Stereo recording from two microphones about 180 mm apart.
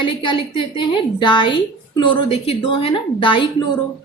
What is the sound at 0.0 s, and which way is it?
A woman's voice, 25° left (ahead or behind).